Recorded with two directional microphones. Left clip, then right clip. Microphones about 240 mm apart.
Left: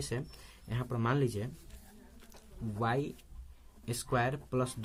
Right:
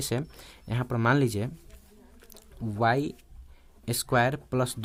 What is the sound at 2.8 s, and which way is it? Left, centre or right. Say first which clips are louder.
Speech: right 8 dB; right.